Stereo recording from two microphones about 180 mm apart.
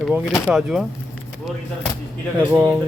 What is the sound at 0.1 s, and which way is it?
Speech, 5° right (ahead or behind).